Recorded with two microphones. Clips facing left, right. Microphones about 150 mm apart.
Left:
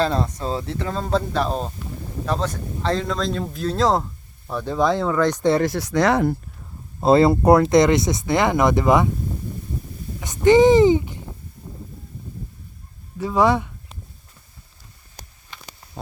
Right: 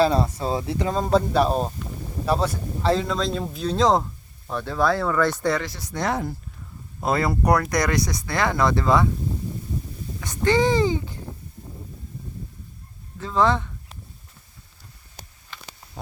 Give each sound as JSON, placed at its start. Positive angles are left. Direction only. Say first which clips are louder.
{"t": 0.0, "sound": "a man's voice", "louder": "right 2 dB", "side_deg": -10}
{"t": 4.5, "sound": "speech", "louder": "left 2 dB", "side_deg": 15}
{"t": 5.6, "sound": "speech", "louder": "left 8 dB", "side_deg": 70}
{"t": 7.0, "sound": "speech", "louder": "left 8 dB", "side_deg": 25}
{"t": 10.2, "sound": "speech", "louder": "left 7 dB", "side_deg": 20}
{"t": 13.1, "sound": "speech", "louder": "left 3 dB", "side_deg": 15}